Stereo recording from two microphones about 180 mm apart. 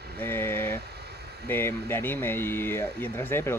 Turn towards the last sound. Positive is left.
turn(degrees=15)  # may be behind; listen again after turning